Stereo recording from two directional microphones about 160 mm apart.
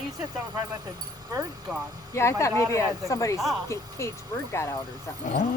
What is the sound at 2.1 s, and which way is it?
Speech, 15° left (ahead or behind).